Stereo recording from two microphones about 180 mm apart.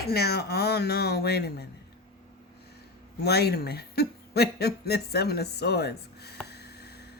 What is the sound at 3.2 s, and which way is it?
Speech, 60° left (ahead or behind).